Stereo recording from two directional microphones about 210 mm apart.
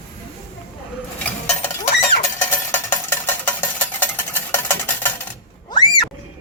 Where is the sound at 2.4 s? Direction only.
15° left (ahead or behind).